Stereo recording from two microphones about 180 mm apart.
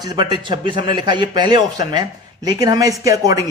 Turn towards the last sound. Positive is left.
turn(degrees=-20)  # may be behind; listen again after turning